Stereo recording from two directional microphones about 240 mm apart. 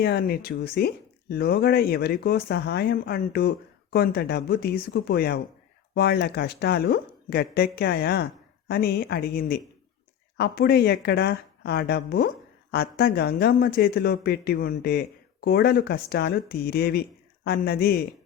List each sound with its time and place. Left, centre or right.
0.0 s speech: left